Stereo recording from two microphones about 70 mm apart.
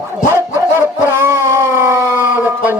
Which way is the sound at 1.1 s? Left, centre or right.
Right.